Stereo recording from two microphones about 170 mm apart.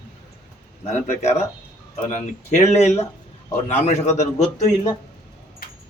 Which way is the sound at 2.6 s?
40° left (ahead or behind).